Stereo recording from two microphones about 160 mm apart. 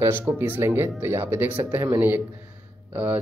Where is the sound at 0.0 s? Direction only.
15° right (ahead or behind).